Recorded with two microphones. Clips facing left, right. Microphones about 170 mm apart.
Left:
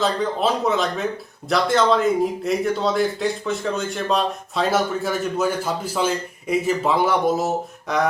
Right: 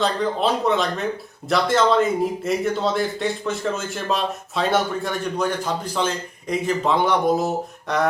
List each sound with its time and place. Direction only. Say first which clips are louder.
0.0 s speech: even; centre (ahead or behind)